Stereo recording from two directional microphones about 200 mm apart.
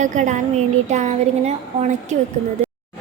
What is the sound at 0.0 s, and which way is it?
A woman's voice, 40° right (ahead or behind).